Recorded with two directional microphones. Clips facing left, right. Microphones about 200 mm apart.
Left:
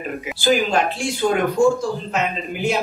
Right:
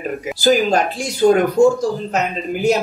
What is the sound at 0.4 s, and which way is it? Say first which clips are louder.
Speech: right 3 dB; 40° right (ahead or behind).